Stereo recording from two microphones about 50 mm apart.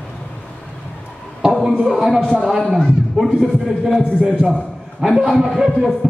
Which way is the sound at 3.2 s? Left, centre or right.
Centre.